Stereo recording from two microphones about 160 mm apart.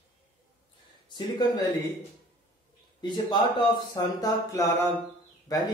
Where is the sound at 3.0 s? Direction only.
30° left (ahead or behind).